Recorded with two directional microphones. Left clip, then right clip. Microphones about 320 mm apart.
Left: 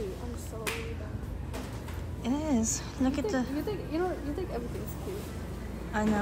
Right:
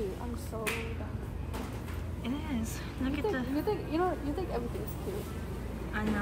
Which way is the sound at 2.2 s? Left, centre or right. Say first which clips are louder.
Left 7 dB; centre.